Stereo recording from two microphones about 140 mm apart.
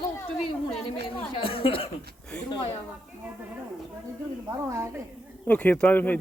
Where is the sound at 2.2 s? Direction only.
5° left (ahead or behind).